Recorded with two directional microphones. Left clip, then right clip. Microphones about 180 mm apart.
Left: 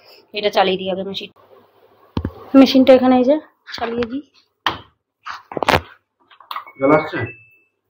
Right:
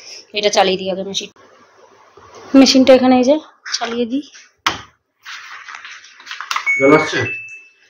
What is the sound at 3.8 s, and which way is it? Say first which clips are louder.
Speech: right 1 dB; 15° right (ahead or behind).